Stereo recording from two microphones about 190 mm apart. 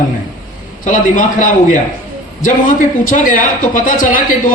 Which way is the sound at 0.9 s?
45° left (ahead or behind).